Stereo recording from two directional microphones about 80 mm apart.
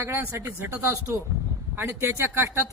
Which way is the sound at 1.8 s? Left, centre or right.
Right.